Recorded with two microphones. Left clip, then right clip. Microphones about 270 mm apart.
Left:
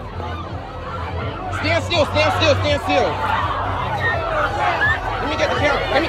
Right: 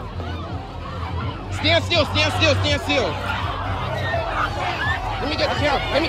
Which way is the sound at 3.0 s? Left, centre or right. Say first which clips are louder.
Left 5 dB; centre.